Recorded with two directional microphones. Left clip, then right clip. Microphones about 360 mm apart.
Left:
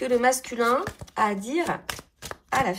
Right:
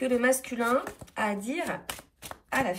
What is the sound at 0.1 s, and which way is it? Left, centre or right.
Speech, centre.